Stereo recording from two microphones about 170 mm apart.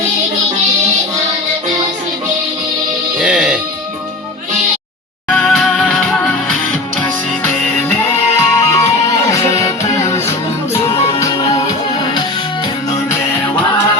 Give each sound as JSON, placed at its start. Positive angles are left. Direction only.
{"t": 3.2, "sound": "music", "side_deg": -5}
{"t": 5.3, "sound": "music", "side_deg": 0}
{"t": 7.0, "sound": "music", "side_deg": 15}
{"t": 10.8, "sound": "music", "side_deg": 35}